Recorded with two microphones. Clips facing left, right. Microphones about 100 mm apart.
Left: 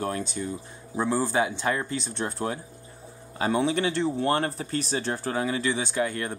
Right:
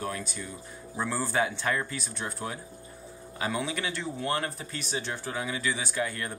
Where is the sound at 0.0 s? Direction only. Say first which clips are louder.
Left 5 dB; 30° left (ahead or behind).